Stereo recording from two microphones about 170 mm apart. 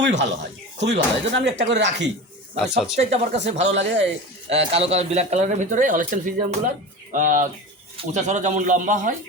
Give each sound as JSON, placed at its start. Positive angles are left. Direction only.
{"t": 0.0, "sound": "speech", "side_deg": -90}
{"t": 3.0, "sound": "speech", "side_deg": -40}
{"t": 3.7, "sound": "speech", "side_deg": -90}
{"t": 4.4, "sound": "speech", "side_deg": -35}